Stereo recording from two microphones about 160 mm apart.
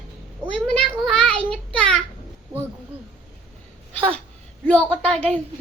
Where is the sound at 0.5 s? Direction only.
5° left (ahead or behind).